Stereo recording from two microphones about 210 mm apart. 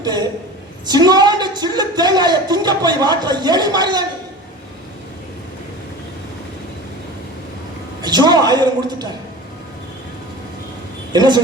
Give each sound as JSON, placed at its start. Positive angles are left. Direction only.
{"t": 0.9, "sound": "speech", "side_deg": -20}
{"t": 8.0, "sound": "speech", "side_deg": -20}
{"t": 11.1, "sound": "a woman's voice", "side_deg": -20}